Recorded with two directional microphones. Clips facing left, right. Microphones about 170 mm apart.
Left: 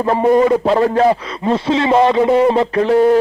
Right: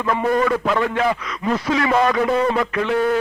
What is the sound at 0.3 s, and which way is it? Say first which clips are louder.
A man's voice: left 8 dB; 25° left (ahead or behind).